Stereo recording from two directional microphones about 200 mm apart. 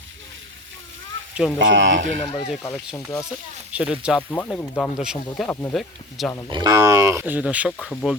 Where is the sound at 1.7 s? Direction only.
65° right (ahead or behind).